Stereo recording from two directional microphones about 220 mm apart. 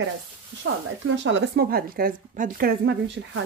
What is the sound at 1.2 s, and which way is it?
Speech, 55° right (ahead or behind).